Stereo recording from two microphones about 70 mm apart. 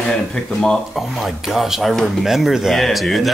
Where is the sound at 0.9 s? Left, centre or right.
Centre.